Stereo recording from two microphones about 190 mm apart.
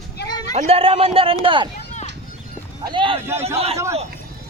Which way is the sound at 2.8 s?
25° right (ahead or behind).